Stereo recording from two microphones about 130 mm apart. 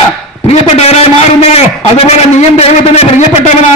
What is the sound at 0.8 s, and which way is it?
A man's voice, 55° left (ahead or behind).